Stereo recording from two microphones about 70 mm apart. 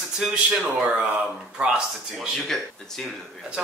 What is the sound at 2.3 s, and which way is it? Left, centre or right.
Speech, centre.